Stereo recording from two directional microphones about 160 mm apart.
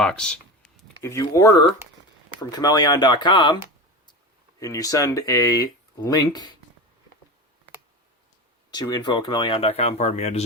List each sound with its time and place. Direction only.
0.0 s speech: 5° left (ahead or behind)
1.0 s speech: 20° left (ahead or behind)
4.6 s speech: 20° left (ahead or behind)
8.7 s speech: 25° left (ahead or behind); by 10.4 s 45° left (ahead or behind)